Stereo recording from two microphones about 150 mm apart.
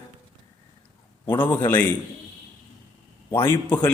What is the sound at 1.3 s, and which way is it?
Speech, 15° left (ahead or behind).